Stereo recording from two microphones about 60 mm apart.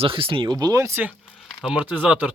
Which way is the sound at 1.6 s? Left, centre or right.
Centre.